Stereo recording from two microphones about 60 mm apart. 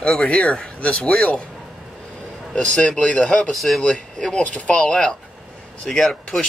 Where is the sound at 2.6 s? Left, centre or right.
Centre.